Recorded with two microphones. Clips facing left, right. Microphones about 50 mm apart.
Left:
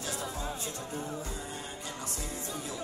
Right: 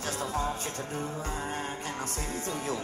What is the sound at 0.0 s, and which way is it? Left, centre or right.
Music, right.